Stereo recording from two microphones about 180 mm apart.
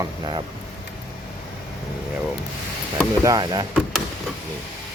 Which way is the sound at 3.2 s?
20° right (ahead or behind).